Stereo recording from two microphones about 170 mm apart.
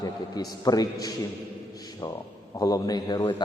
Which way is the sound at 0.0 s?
20° left (ahead or behind).